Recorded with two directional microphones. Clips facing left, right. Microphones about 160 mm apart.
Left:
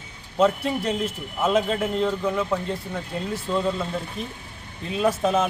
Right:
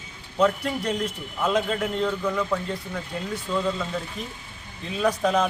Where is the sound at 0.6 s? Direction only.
5° left (ahead or behind).